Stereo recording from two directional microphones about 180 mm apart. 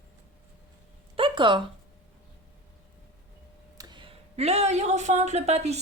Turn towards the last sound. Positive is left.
turn(degrees=-35)  # may be behind; listen again after turning